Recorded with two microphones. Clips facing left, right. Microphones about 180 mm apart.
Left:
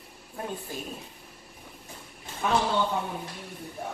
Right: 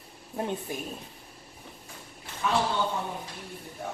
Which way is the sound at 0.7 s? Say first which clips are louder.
Right 2 dB; 15° right (ahead or behind).